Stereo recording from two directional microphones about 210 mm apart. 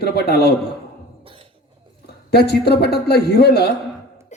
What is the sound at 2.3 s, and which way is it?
Speech, 50° left (ahead or behind).